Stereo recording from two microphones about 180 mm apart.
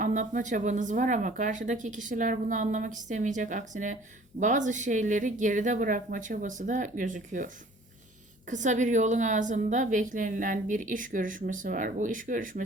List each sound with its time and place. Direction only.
0.0 s a woman's voice: 45° right (ahead or behind)